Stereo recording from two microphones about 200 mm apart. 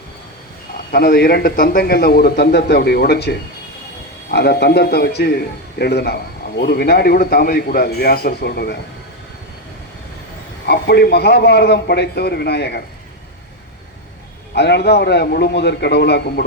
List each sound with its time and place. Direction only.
0.9 s a man's voice: 50° left (ahead or behind)
10.7 s a man's voice: 55° left (ahead or behind)
14.5 s a man's voice: 55° left (ahead or behind)